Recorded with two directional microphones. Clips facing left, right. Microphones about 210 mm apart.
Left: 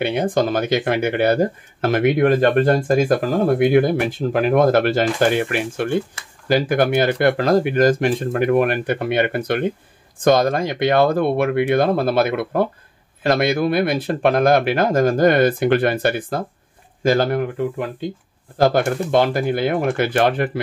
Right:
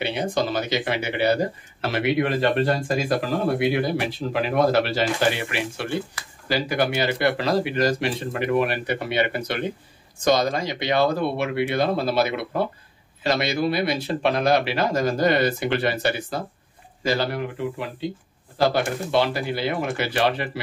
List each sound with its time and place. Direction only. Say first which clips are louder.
0.0 s speech: left 6 dB; 50° left (ahead or behind)
6.2 s speech: right 1 dB; 25° left (ahead or behind)
6.5 s speech: left 6 dB; 50° left (ahead or behind)